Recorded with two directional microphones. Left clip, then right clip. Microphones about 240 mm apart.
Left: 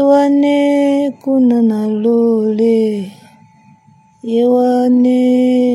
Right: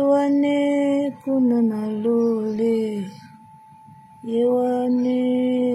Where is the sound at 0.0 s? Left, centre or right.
Left.